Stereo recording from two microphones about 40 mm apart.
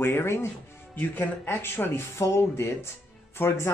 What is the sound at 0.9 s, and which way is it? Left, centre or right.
Speech, left.